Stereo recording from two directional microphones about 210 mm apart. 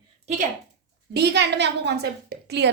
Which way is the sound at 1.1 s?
55° right (ahead or behind).